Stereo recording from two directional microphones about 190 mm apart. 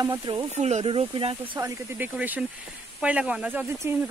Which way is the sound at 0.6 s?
35° right (ahead or behind).